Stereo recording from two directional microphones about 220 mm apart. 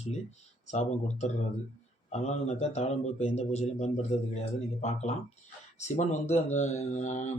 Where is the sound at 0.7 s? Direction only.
30° left (ahead or behind).